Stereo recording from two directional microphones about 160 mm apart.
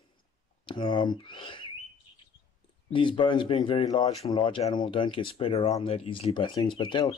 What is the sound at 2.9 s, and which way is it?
Speech, 30° left (ahead or behind).